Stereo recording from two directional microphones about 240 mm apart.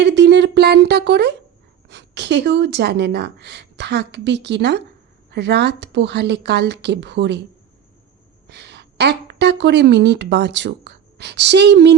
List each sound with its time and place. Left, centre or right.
0.0 s a woman's voice: right
8.4 s a woman's voice: right